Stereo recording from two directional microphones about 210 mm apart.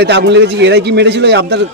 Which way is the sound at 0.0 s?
55° right (ahead or behind).